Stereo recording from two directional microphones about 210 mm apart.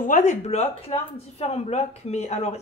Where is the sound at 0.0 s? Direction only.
35° left (ahead or behind).